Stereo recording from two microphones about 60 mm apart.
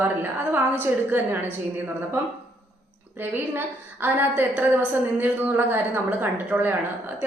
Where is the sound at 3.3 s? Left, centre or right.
Right.